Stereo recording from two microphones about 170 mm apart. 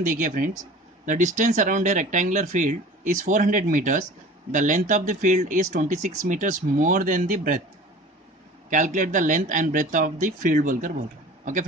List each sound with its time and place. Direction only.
0.0 s speech: 50° right (ahead or behind)
8.6 s speech: 50° right (ahead or behind)